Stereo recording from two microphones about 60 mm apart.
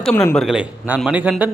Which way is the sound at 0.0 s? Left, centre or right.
Centre.